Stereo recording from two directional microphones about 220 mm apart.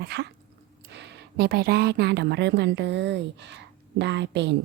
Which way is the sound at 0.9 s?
50° right (ahead or behind).